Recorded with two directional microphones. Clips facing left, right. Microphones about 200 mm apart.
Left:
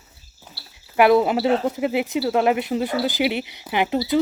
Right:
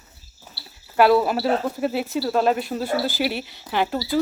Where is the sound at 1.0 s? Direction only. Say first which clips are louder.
Left 1 dB; 20° left (ahead or behind).